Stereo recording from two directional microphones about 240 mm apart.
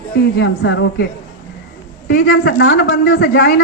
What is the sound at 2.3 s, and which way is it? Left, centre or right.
A woman's voice, left.